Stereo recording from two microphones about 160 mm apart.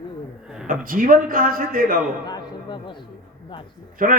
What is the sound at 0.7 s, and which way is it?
Speech, 60° right (ahead or behind).